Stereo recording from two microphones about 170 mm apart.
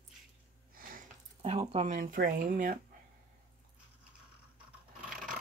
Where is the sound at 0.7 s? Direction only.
55° right (ahead or behind).